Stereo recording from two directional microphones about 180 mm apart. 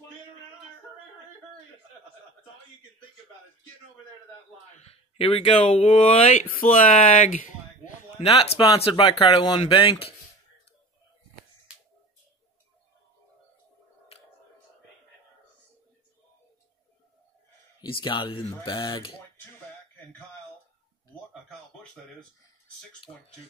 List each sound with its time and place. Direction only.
4.8 s speech: 30° left (ahead or behind)
6.3 s speech: 50° left (ahead or behind)
8.2 s speech: 35° left (ahead or behind)
17.7 s speech: 25° left (ahead or behind)